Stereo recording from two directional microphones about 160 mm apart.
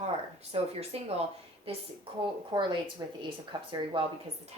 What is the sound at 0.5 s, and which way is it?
A woman's voice, 40° right (ahead or behind).